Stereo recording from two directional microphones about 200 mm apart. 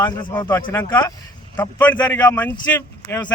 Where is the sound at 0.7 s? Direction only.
15° left (ahead or behind).